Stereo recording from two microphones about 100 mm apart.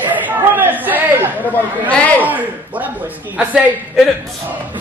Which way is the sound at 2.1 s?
15° right (ahead or behind).